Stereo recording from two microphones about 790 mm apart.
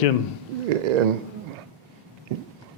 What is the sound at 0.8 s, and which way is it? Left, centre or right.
Speech, right.